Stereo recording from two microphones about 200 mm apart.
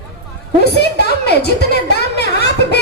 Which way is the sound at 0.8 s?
55° left (ahead or behind).